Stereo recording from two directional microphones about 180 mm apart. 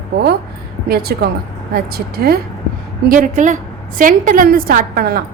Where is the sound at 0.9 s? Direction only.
60° right (ahead or behind).